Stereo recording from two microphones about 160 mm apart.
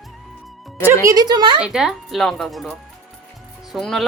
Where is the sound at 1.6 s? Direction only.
5° right (ahead or behind).